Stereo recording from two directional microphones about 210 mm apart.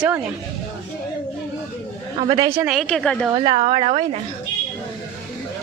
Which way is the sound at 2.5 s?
5° right (ahead or behind).